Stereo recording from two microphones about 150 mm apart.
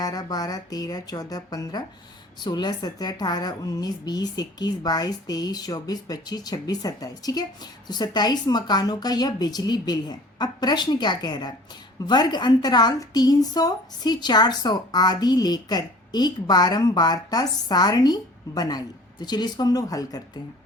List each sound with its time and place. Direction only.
0.0 s a woman's voice: 25° left (ahead or behind)